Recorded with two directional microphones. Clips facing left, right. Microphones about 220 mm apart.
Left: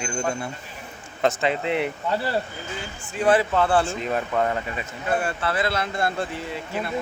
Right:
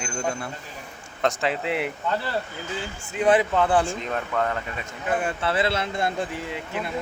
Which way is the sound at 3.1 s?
20° right (ahead or behind).